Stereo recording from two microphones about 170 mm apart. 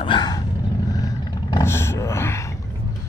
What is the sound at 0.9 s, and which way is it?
Vehicle, 20° left (ahead or behind).